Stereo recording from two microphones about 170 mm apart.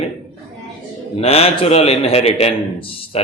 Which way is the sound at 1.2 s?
35° left (ahead or behind).